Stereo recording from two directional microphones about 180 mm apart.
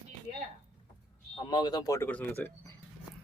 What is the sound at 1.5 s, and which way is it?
Speech, 25° left (ahead or behind).